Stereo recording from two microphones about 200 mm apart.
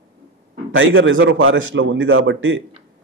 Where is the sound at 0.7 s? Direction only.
75° right (ahead or behind).